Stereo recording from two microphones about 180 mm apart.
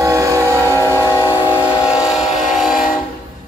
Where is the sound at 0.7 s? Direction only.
15° left (ahead or behind).